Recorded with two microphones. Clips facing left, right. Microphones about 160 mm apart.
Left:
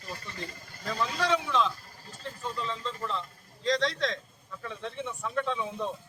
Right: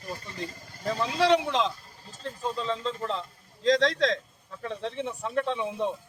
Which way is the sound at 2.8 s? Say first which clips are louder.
Right 4 dB; 35° right (ahead or behind).